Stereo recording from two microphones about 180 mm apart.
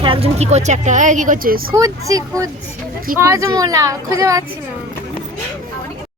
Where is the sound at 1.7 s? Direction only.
20° right (ahead or behind).